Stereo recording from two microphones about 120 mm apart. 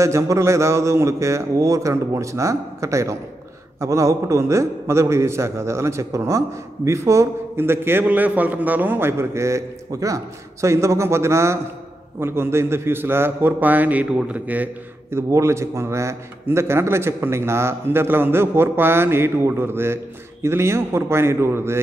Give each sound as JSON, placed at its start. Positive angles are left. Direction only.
{"t": 0.0, "sound": "a man's voice", "side_deg": -25}